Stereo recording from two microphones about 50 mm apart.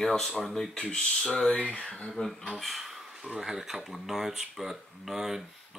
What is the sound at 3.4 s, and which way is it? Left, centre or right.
Speech, centre.